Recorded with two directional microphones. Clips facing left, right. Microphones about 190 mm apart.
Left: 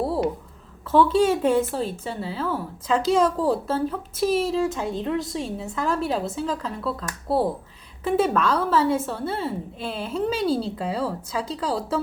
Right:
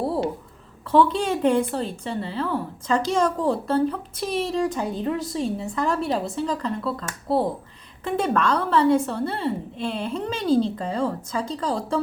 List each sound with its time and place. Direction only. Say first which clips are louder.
0.9 s a woman's voice: left 1 dB; 5° left (ahead or behind)